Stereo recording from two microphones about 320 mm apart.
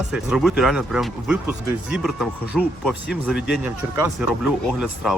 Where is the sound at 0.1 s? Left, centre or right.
Centre.